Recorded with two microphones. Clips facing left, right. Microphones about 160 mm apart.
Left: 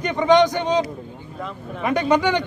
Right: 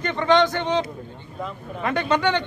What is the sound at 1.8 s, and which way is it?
Speech, 15° left (ahead or behind).